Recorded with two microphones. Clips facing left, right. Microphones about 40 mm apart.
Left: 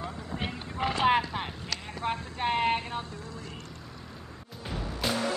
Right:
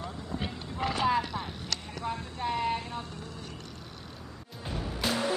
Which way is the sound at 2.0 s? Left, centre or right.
Left.